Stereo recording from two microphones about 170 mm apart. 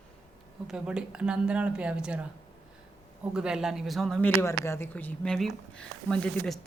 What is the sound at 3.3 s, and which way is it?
A woman's voice, 5° right (ahead or behind).